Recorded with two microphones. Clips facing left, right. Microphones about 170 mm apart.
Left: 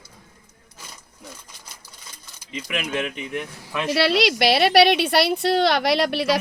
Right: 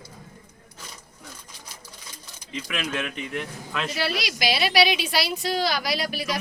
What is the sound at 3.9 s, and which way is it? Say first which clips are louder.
Speech: left 13 dB; 75° left (ahead or behind).